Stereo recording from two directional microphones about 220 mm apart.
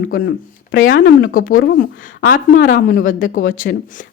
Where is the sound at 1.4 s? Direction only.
40° left (ahead or behind).